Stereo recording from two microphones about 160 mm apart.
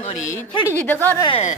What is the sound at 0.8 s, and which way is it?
Speech, 10° left (ahead or behind).